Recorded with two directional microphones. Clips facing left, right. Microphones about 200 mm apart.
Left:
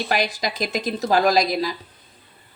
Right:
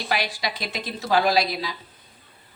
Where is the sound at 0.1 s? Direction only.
45° left (ahead or behind).